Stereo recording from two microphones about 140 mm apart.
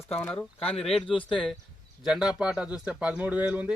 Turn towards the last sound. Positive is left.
turn(degrees=-10)  # may be behind; listen again after turning